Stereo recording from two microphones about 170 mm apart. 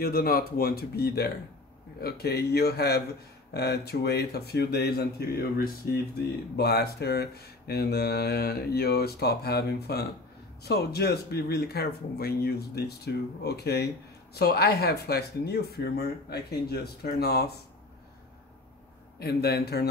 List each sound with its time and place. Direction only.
0.0 s speech: 65° left (ahead or behind)
19.1 s speech: 70° left (ahead or behind)